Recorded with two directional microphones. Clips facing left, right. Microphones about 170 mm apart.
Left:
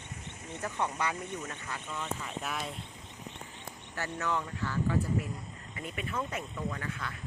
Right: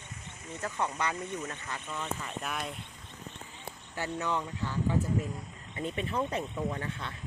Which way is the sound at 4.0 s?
15° right (ahead or behind).